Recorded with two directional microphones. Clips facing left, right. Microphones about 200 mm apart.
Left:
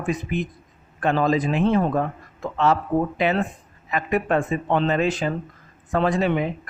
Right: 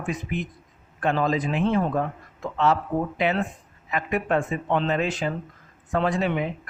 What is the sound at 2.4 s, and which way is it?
Speech, 40° left (ahead or behind).